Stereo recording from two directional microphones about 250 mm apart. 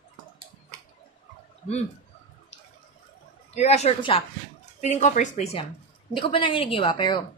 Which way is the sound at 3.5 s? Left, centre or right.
Left.